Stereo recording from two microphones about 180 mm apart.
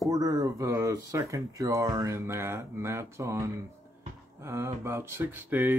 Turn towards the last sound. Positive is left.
turn(degrees=-10)  # may be behind; listen again after turning